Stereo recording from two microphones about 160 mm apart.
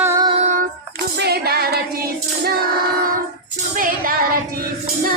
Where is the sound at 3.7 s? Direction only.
60° right (ahead or behind).